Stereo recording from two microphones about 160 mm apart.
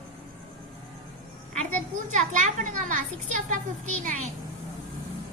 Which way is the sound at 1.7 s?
50° right (ahead or behind).